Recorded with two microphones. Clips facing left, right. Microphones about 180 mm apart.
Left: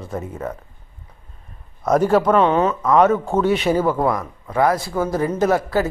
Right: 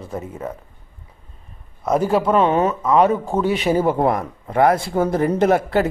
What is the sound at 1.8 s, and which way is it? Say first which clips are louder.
Speech: left 2 dB; 5° right (ahead or behind).